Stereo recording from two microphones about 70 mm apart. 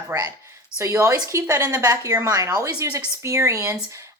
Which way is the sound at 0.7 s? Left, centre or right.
Right.